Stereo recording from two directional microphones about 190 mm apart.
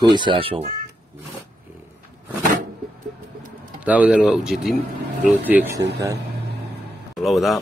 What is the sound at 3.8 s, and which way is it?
Speech, 5° right (ahead or behind).